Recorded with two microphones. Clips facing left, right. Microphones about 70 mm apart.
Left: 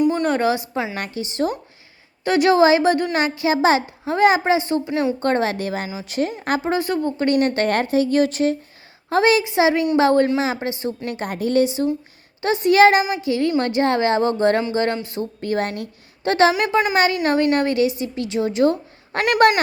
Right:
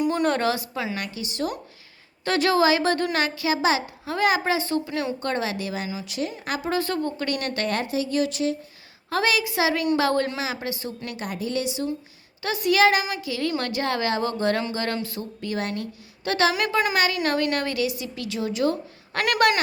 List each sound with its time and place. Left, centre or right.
0.0 s a sound: centre
0.4 s a woman's voice: left
0.9 s a woman's voice: left
2.2 s a woman's voice: centre
5.2 s a woman's voice: left
6.7 s a woman's voice: centre
7.2 s a woman's voice: left
7.7 s a woman's voice: left
9.0 s a woman's voice: left
11.3 s a woman's voice: left
15.4 s a woman's voice: left